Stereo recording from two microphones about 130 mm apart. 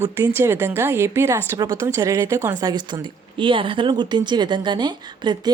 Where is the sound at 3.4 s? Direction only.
40° right (ahead or behind).